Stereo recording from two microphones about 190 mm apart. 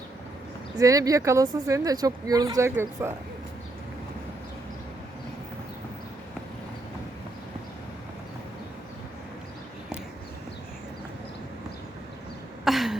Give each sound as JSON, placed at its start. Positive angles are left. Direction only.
{"t": 0.8, "sound": "speech", "side_deg": -20}
{"t": 12.6, "sound": "throat clearing", "side_deg": 0}